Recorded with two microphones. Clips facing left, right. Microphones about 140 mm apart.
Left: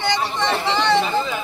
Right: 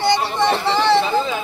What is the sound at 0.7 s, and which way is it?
Speech, 5° right (ahead or behind).